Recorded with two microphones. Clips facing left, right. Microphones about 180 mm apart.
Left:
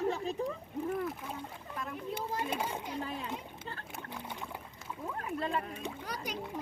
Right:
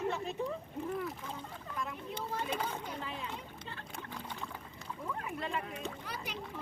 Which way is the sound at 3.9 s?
10° left (ahead or behind).